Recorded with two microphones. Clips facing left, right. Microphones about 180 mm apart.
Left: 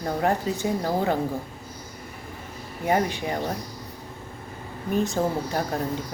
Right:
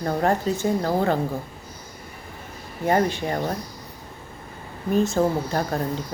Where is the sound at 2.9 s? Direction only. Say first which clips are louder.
Right 2 dB; 10° left (ahead or behind).